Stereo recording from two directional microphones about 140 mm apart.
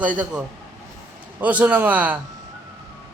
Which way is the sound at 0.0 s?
10° right (ahead or behind).